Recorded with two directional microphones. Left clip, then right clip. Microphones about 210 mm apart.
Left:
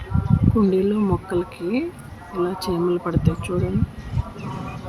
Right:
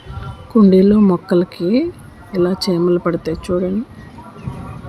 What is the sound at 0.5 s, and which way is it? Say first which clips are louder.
Speech: right 9 dB; 15° right (ahead or behind).